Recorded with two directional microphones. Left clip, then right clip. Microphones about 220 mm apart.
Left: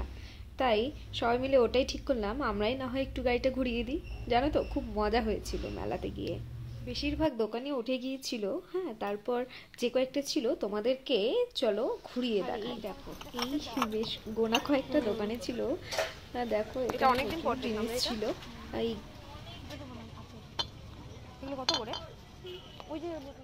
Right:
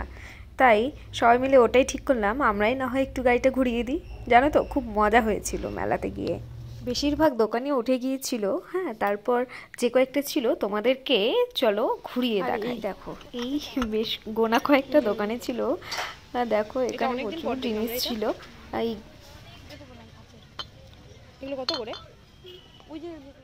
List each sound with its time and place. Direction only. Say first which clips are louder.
0.6 s a woman's voice: right 10 dB; 20° right (ahead or behind)
6.9 s a woman's voice: right 9 dB; 30° right (ahead or behind)